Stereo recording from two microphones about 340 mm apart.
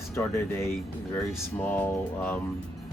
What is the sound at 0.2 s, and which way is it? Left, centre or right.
Speech, centre.